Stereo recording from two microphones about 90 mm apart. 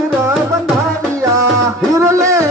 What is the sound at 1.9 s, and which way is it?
Music, 35° right (ahead or behind).